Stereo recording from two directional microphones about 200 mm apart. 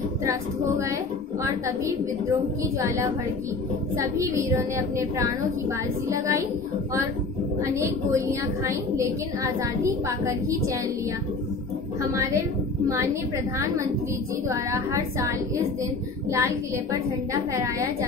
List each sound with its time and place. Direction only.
0.2 s a woman's voice: 15° right (ahead or behind)
3.9 s a woman's voice: 15° right (ahead or behind)
7.6 s a woman's voice: 15° right (ahead or behind)
12.0 s a woman's voice: 15° right (ahead or behind)
14.5 s a woman's voice: 15° right (ahead or behind)